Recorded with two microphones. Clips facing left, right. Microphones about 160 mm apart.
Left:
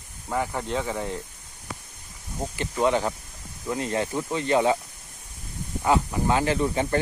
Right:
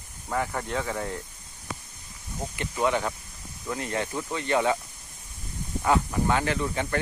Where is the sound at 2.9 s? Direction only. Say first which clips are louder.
Left 3 dB; 30° left (ahead or behind).